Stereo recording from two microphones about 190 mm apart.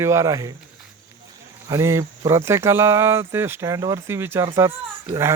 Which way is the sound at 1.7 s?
15° right (ahead or behind).